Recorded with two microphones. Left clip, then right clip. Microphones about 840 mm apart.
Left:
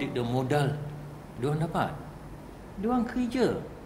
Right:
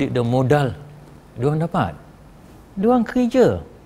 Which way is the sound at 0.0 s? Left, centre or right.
Right.